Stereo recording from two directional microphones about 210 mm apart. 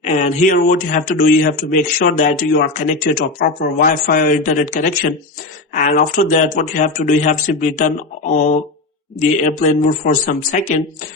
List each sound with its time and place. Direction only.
0.0 s speech: 35° left (ahead or behind)
9.1 s speech: 35° left (ahead or behind)